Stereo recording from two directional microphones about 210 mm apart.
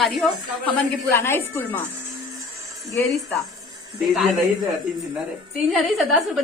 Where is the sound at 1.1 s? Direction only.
10° left (ahead or behind).